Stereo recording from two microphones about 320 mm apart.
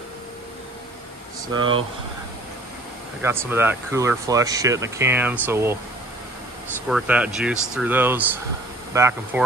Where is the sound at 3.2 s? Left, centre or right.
Centre.